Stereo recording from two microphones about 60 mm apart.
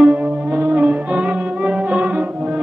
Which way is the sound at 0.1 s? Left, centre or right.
Right.